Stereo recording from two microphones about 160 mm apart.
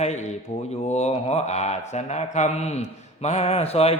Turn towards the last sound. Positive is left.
turn(degrees=40)  # may be behind; listen again after turning